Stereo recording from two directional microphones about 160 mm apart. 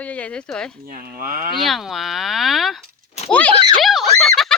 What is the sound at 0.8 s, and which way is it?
Speech, 60° right (ahead or behind).